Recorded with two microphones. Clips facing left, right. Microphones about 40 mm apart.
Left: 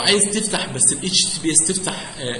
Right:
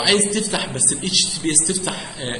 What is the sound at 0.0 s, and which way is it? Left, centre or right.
A man's voice, centre.